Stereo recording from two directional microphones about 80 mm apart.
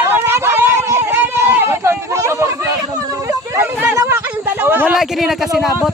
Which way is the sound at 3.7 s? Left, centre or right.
Right.